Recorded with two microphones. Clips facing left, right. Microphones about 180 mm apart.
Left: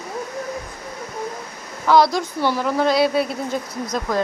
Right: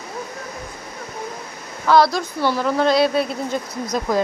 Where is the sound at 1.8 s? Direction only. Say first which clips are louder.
Even; 15° left (ahead or behind).